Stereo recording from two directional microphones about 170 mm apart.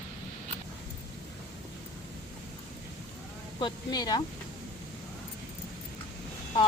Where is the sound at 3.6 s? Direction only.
25° left (ahead or behind).